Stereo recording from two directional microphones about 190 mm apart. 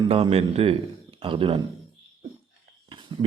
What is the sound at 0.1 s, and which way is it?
Speech, 30° right (ahead or behind).